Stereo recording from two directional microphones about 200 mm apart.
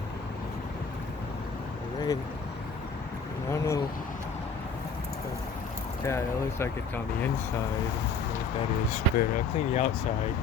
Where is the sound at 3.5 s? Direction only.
15° left (ahead or behind).